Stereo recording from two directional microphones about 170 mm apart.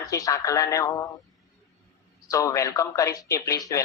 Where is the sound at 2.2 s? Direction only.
20° left (ahead or behind).